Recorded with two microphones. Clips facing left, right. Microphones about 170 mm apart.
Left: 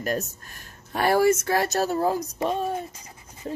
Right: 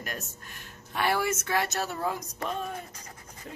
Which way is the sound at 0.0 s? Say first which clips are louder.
Left 11 dB; 40° left (ahead or behind).